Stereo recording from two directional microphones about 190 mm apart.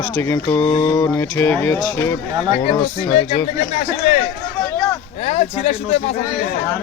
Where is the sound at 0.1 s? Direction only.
15° left (ahead or behind).